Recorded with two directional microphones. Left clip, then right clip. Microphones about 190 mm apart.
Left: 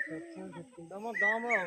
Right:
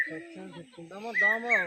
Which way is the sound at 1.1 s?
60° right (ahead or behind).